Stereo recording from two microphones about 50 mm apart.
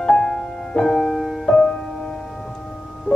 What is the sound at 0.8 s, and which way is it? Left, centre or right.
Music, centre.